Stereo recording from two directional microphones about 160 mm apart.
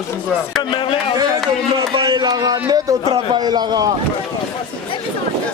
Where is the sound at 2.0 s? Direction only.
25° right (ahead or behind).